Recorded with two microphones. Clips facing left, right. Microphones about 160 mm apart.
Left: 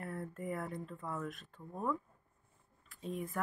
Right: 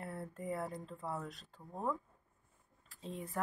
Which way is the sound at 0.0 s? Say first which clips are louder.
Left 2 dB; 30° right (ahead or behind).